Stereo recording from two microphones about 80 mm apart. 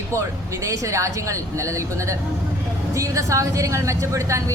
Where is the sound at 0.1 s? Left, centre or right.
Right.